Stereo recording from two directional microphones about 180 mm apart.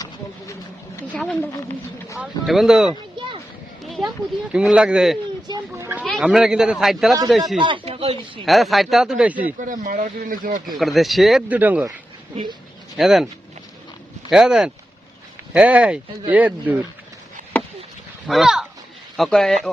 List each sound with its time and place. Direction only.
1.1 s a woman's voice: 10° left (ahead or behind)
2.1 s a man's voice: 5° right (ahead or behind)
3.2 s a sound: 25° right (ahead or behind)
3.8 s a sound: centre (ahead or behind)
4.5 s a man's voice: 5° right (ahead or behind)
5.5 s children playing: 20° right (ahead or behind)
6.1 s a man's voice: centre (ahead or behind)
7.6 s speech: 30° right (ahead or behind)
8.4 s a man's voice: centre (ahead or behind)
9.6 s speech: 45° right (ahead or behind)
10.8 s a man's voice: centre (ahead or behind)
13.0 s a man's voice: centre (ahead or behind)
14.3 s a man's voice: 5° right (ahead or behind)
18.3 s a man's voice: centre (ahead or behind)